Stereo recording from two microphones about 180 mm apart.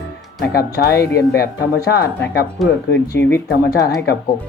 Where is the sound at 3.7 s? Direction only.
65° left (ahead or behind).